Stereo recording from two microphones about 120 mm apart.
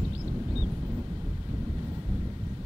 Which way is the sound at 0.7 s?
20° right (ahead or behind).